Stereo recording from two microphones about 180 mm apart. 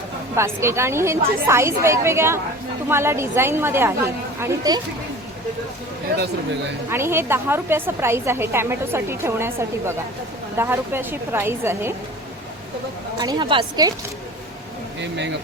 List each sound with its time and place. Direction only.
0.3 s a woman's voice: 15° right (ahead or behind)
6.9 s a woman's voice: 15° right (ahead or behind)
13.1 s a woman's voice: 25° right (ahead or behind)